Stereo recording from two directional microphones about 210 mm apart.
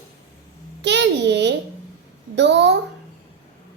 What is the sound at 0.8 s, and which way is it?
Child singing, 55° right (ahead or behind).